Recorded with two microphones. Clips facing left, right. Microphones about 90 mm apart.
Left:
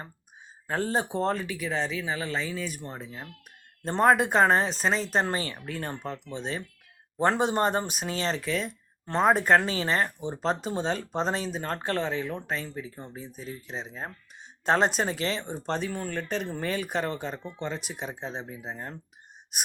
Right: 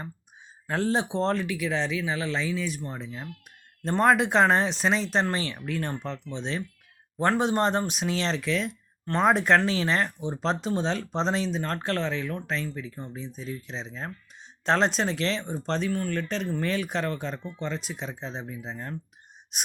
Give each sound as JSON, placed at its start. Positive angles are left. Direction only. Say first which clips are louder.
{"t": 0.7, "sound": "speech", "louder": "right 2 dB", "side_deg": 0}
{"t": 17.7, "sound": "speech", "louder": "right 2 dB", "side_deg": 60}
{"t": 18.0, "sound": "speech", "louder": "even", "side_deg": 15}